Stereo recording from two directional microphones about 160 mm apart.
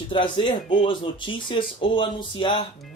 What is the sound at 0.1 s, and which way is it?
A man's voice, 30° left (ahead or behind).